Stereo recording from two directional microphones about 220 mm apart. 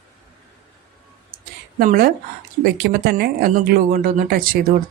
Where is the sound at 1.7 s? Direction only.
40° right (ahead or behind).